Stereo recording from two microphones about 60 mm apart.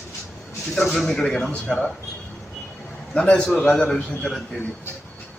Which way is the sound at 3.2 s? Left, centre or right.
Centre.